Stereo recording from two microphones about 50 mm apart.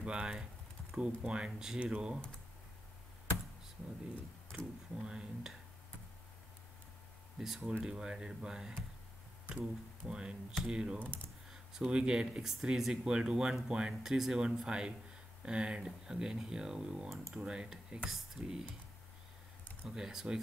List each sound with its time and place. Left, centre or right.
0.0 s speech: centre
1.5 s speech: centre
4.5 s speech: centre
7.3 s speech: centre
18.0 s speech: centre
19.9 s speech: centre